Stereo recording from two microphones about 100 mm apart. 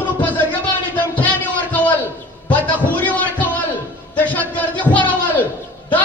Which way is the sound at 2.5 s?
15° left (ahead or behind).